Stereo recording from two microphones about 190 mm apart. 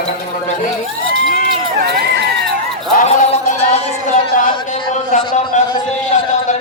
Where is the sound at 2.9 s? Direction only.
40° left (ahead or behind).